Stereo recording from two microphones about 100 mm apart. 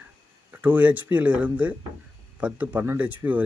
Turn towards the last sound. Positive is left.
turn(degrees=-15)  # may be behind; listen again after turning